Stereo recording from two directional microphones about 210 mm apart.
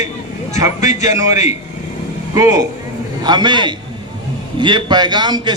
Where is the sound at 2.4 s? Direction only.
15° right (ahead or behind).